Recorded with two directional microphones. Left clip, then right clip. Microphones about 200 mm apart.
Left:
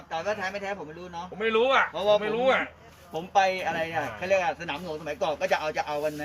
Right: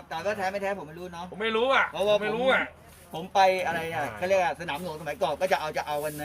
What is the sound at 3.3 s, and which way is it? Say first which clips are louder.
Speech: right 2 dB; 55° right (ahead or behind).